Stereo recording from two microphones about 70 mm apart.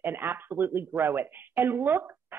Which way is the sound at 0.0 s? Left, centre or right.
Right.